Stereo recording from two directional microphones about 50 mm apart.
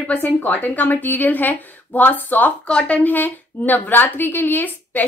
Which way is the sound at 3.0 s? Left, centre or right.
Left.